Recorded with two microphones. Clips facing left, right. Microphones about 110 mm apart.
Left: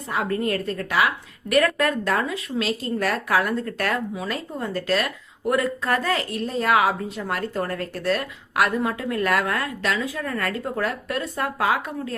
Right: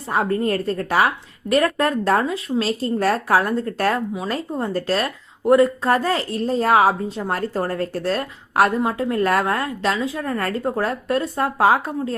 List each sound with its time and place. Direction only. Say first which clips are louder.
0.1 s a woman's voice: right 4 dB; 35° right (ahead or behind)